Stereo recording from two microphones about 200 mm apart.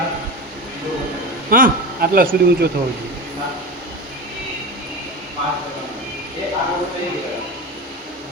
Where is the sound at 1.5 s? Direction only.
45° right (ahead or behind).